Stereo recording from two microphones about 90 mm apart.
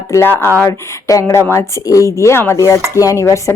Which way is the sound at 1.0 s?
35° left (ahead or behind).